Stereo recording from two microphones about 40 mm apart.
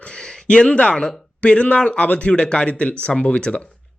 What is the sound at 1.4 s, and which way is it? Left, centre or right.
Speech, left.